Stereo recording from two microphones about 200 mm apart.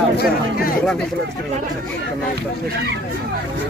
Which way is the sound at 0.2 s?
45° left (ahead or behind).